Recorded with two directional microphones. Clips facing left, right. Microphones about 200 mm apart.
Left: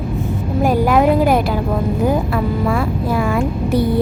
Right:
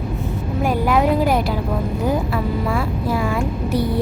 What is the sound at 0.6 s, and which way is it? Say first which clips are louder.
Vehicle: left 4 dB; 45° left (ahead or behind).